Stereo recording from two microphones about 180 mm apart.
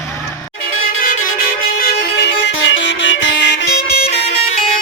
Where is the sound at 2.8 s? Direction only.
90° left; by 3.8 s 75° left (ahead or behind).